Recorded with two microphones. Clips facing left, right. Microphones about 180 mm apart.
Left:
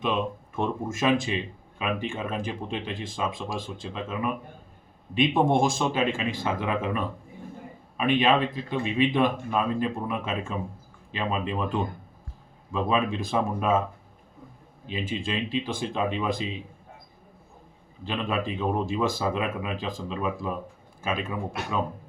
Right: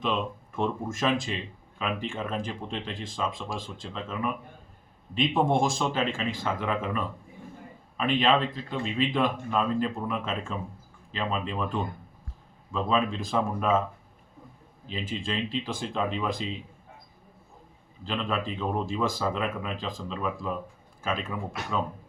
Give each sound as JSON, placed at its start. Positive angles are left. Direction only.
{"t": 0.0, "sound": "speech", "side_deg": 15}
{"t": 15.3, "sound": "speech", "side_deg": 15}
{"t": 18.1, "sound": "speech", "side_deg": 10}